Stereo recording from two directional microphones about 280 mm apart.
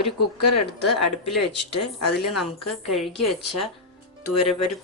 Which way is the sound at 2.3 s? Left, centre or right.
Centre.